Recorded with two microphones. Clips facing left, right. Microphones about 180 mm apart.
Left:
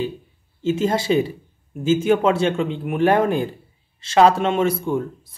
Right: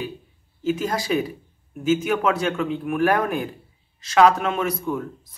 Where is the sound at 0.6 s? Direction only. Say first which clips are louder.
Left 4 dB; 25° left (ahead or behind).